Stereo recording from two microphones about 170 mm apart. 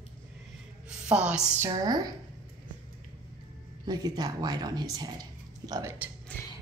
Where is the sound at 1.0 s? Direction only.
5° right (ahead or behind).